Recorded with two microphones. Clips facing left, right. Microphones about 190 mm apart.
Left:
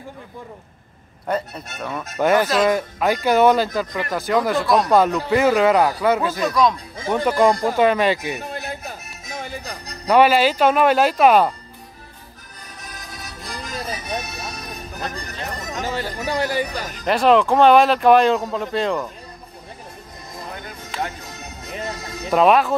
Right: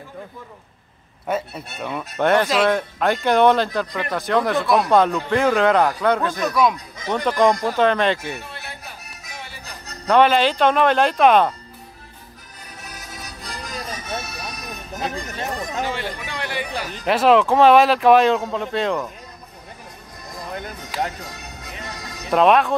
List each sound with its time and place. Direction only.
1.2 s speech: 5° right (ahead or behind)
2.1 s speech: 5° left (ahead or behind)
7.1 s speech: 10° left (ahead or behind)
8.5 s music: 45° left (ahead or behind)
9.8 s speech: 10° left (ahead or behind)
13.1 s music: centre (ahead or behind); by 14.8 s 25° left (ahead or behind)
15.7 s speech: 40° left (ahead or behind)
17.0 s speech: centre (ahead or behind)
21.8 s music: 25° left (ahead or behind)
22.3 s speech: centre (ahead or behind)